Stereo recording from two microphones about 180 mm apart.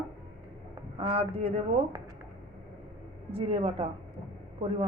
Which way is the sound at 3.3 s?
30° right (ahead or behind).